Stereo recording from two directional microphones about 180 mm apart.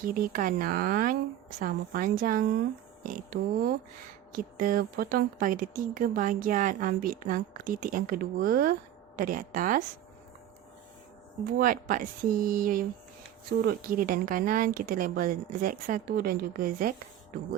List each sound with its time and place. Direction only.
0.0 s speech: 50° right (ahead or behind)
11.4 s speech: 50° right (ahead or behind)